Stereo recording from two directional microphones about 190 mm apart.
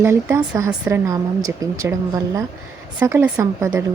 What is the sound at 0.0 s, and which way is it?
A woman's voice, 10° right (ahead or behind).